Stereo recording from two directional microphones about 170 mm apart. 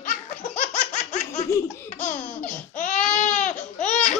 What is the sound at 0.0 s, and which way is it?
Laughter, 50° left (ahead or behind).